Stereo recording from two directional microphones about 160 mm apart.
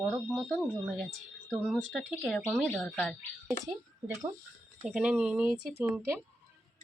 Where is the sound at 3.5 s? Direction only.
20° right (ahead or behind).